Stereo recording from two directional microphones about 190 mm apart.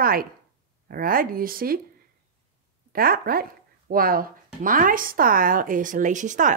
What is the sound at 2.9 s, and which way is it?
Speech, 50° right (ahead or behind).